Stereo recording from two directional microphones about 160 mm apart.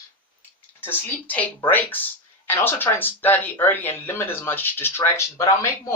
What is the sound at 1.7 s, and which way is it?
Speech, 10° left (ahead or behind).